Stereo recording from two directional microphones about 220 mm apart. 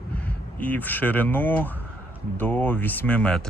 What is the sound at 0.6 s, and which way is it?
Speech, 5° left (ahead or behind).